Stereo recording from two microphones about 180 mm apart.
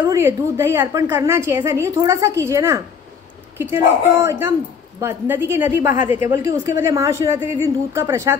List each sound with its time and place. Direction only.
0.0 s a woman's voice: 15° right (ahead or behind)